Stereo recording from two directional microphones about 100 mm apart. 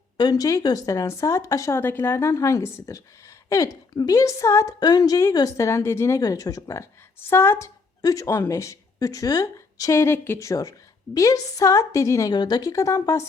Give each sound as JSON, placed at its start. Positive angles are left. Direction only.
{"t": 0.2, "sound": "speech", "side_deg": 40}
{"t": 4.8, "sound": "speech", "side_deg": 40}
{"t": 7.3, "sound": "a woman's voice", "side_deg": 25}
{"t": 8.0, "sound": "speech", "side_deg": 35}
{"t": 12.3, "sound": "speech", "side_deg": 45}